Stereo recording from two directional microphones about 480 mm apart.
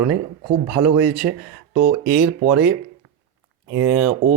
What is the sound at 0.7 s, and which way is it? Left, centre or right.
Speech, centre.